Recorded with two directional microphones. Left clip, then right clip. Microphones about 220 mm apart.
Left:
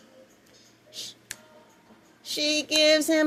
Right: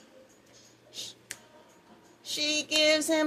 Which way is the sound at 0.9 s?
35° left (ahead or behind).